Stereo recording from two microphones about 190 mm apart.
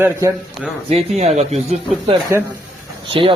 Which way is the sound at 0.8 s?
35° right (ahead or behind).